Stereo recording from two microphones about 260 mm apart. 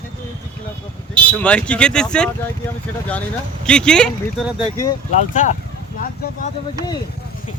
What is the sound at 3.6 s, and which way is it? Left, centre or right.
Speech, centre.